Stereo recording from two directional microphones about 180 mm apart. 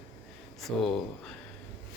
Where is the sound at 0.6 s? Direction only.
Centre (ahead or behind).